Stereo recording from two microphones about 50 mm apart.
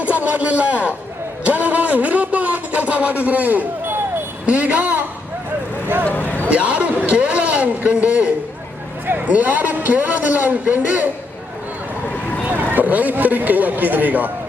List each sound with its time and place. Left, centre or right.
0.0 s a man's voice: right
1.5 s a sound: right
4.4 s a man's voice: right
6.1 s speech: left
6.5 s a man's voice: right
12.0 s vehicle: left
12.5 s a man's voice: right